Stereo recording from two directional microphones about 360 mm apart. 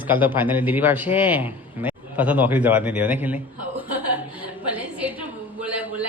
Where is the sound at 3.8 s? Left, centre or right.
Centre.